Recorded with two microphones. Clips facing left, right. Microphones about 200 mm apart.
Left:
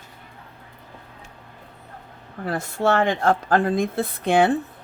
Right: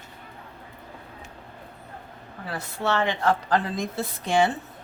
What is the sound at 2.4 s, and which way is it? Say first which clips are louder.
Speech: left 6 dB; 50° left (ahead or behind).